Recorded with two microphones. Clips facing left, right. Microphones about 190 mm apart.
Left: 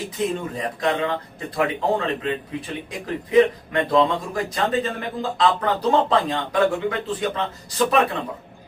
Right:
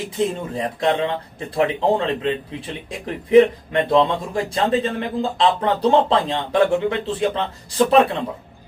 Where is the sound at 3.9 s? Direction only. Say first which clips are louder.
Right 2 dB; 30° right (ahead or behind).